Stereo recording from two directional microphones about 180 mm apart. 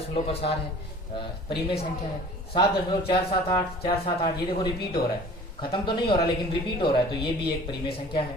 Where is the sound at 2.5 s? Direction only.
30° left (ahead or behind).